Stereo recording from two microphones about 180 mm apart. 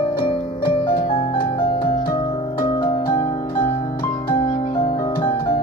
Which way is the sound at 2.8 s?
25° left (ahead or behind).